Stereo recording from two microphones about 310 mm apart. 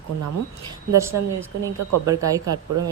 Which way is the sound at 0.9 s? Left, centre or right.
Centre.